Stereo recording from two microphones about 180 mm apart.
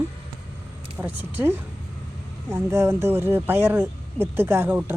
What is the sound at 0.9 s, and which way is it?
Speech, 10° right (ahead or behind).